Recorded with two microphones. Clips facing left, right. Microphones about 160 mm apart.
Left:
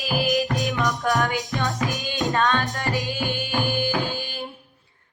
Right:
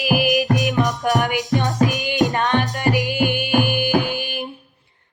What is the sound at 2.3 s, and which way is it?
Music, 15° right (ahead or behind).